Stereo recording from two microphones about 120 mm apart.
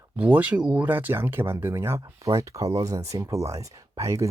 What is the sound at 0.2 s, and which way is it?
Speech, 10° right (ahead or behind).